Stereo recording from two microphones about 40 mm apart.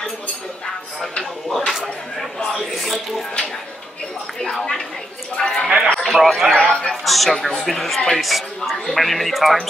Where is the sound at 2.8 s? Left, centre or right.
Centre.